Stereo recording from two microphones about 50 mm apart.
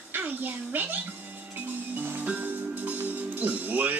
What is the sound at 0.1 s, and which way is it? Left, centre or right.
Speech, right.